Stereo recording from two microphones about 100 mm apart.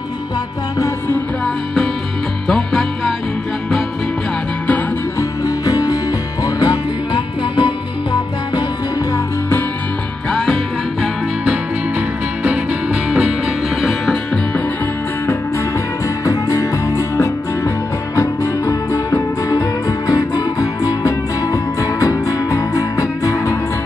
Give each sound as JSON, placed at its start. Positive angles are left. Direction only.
{"t": 0.7, "sound": "music", "side_deg": 30}
{"t": 2.4, "sound": "music", "side_deg": 5}
{"t": 5.4, "sound": "music", "side_deg": 40}
{"t": 12.4, "sound": "music", "side_deg": -5}
{"t": 16.3, "sound": "music", "side_deg": 30}
{"t": 19.5, "sound": "music", "side_deg": 40}